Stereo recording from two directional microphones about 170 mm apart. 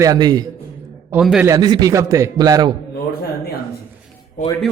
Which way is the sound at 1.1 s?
5° right (ahead or behind).